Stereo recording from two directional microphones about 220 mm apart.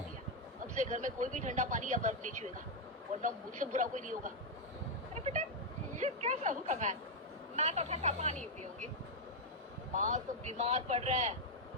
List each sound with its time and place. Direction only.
0.7 s speech: 30° right (ahead or behind)
9.9 s speech: 35° right (ahead or behind)